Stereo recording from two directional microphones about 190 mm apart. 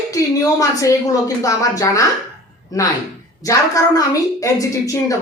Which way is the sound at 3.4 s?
20° left (ahead or behind).